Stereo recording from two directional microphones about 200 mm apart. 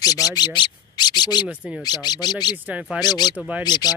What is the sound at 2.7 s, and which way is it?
Speech, 5° right (ahead or behind).